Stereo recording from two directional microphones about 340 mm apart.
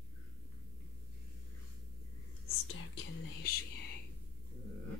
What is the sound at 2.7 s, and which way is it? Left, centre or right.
Whispering, left.